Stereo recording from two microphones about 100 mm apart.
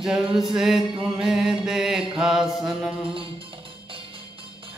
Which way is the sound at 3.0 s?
65° right (ahead or behind).